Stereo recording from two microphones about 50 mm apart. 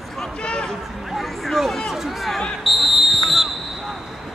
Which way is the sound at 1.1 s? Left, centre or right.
Centre.